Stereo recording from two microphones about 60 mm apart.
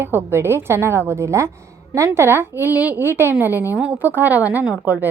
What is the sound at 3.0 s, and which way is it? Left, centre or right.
A woman's voice, right.